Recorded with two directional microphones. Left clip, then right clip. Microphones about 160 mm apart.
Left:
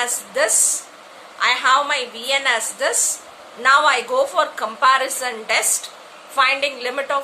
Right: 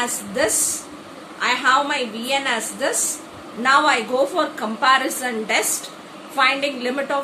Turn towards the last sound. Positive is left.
turn(degrees=50)  # may be behind; listen again after turning